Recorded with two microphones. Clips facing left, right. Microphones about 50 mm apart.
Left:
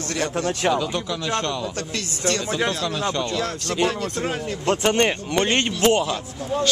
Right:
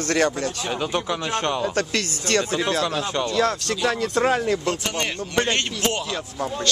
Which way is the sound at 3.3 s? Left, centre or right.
Right.